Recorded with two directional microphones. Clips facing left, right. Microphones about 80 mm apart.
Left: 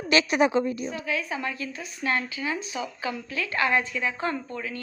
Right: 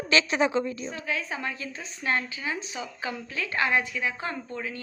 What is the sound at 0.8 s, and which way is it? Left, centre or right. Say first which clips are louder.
Speech: left 2 dB; right.